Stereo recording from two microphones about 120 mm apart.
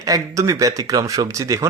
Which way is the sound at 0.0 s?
30° right (ahead or behind).